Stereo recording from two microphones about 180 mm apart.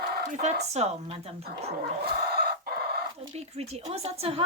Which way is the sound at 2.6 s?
60° right (ahead or behind).